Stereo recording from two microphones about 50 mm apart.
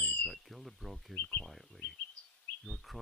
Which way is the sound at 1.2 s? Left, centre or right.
Left.